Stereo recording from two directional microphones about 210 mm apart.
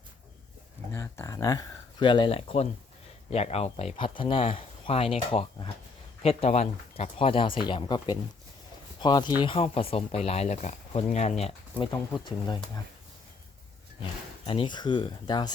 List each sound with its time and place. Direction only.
0.9 s speech: 10° left (ahead or behind)
14.4 s speech: 25° left (ahead or behind)